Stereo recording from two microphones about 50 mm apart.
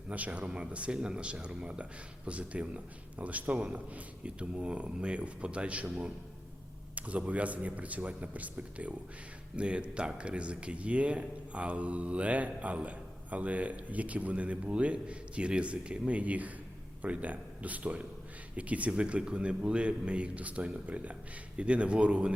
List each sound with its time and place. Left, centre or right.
0.1 s speech: right